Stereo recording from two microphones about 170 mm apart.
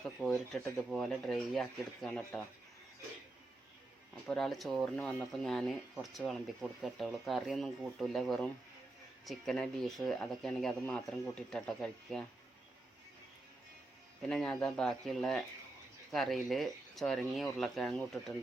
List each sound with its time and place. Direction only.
0.3 s speech: 5° left (ahead or behind)
4.3 s speech: centre (ahead or behind)
14.2 s speech: 5° left (ahead or behind)